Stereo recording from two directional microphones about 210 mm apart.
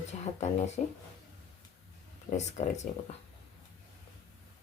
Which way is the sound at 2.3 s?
35° left (ahead or behind).